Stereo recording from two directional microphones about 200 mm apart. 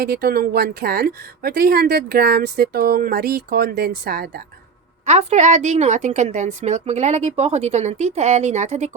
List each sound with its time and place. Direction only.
0.0 s speech: 50° right (ahead or behind)
5.0 s a woman's voice: 35° right (ahead or behind)